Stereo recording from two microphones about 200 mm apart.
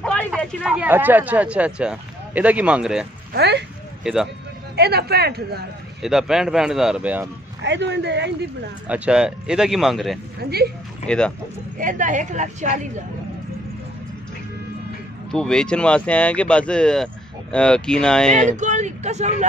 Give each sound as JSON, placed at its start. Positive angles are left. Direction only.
{"t": 0.0, "sound": "speech", "side_deg": 5}
{"t": 3.3, "sound": "speech", "side_deg": -55}
{"t": 4.0, "sound": "speech", "side_deg": 0}
{"t": 4.7, "sound": "speech", "side_deg": -55}
{"t": 6.0, "sound": "speech", "side_deg": 0}
{"t": 7.6, "sound": "speech", "side_deg": -60}
{"t": 8.8, "sound": "speech", "side_deg": -5}
{"t": 10.4, "sound": "speech", "side_deg": -50}
{"t": 11.1, "sound": "speech", "side_deg": 5}
{"t": 11.8, "sound": "a woman's voice", "side_deg": -40}
{"t": 15.3, "sound": "speech", "side_deg": 5}
{"t": 18.5, "sound": "a woman's voice", "side_deg": -35}